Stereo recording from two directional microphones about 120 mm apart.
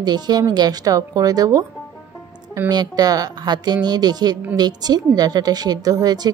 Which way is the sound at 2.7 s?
35° right (ahead or behind).